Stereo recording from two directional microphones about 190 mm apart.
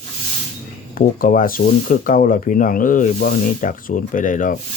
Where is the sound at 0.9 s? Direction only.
45° left (ahead or behind).